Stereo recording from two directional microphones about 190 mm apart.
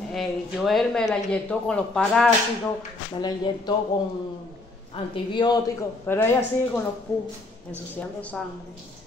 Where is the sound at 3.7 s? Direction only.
20° left (ahead or behind).